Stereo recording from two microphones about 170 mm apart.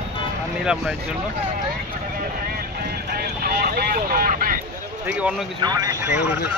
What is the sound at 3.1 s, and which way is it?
Vehicle, 65° right (ahead or behind).